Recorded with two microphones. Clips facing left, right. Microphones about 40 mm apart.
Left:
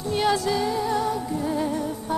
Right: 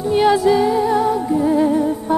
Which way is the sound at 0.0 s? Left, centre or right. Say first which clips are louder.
Right 9 dB; centre.